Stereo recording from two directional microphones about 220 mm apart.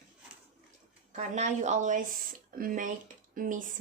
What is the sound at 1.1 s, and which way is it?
A woman's voice, 35° right (ahead or behind).